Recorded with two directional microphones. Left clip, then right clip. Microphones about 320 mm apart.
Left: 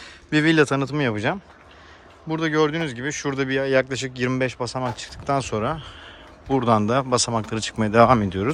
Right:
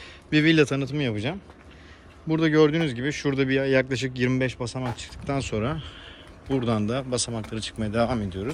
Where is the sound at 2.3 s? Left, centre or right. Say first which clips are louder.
Right 1 dB; centre.